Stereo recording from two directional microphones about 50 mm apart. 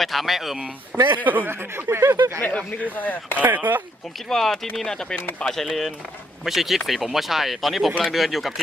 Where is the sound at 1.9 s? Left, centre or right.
Right.